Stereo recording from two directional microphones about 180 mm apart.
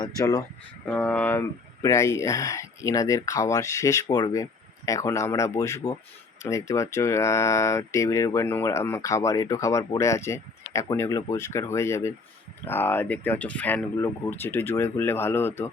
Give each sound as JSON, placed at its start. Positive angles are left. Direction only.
{"t": 0.0, "sound": "speech", "side_deg": 20}
{"t": 0.9, "sound": "speech", "side_deg": 10}